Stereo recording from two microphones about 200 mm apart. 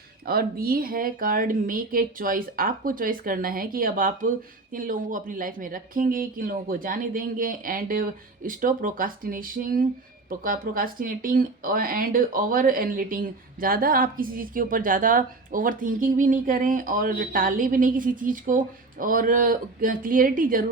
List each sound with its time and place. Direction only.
0.3 s speech: 50° right (ahead or behind)